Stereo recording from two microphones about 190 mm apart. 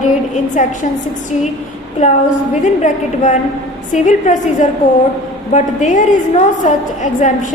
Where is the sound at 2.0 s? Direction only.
40° left (ahead or behind).